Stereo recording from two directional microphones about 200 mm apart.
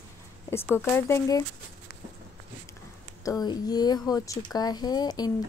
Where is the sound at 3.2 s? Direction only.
20° left (ahead or behind).